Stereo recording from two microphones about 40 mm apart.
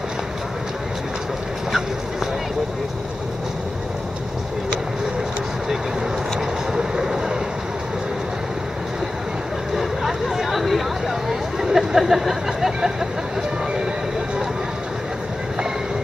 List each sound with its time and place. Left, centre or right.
6.7 s vehicle: centre
9.8 s hubbub: centre
11.6 s a sound: centre